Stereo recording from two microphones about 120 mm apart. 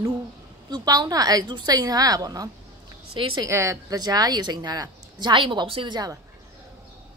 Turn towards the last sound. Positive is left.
turn(degrees=-45)  # may be behind; listen again after turning